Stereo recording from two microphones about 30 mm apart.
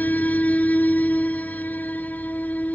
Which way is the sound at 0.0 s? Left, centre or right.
Left.